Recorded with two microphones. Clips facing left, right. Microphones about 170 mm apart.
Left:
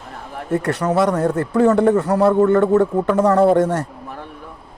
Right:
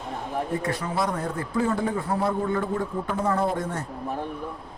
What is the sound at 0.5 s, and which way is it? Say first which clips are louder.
A man's voice: left 13 dB; 75° left (ahead or behind).